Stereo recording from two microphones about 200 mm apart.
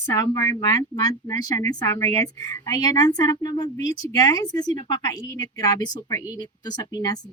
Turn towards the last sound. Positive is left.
turn(degrees=20)  # may be behind; listen again after turning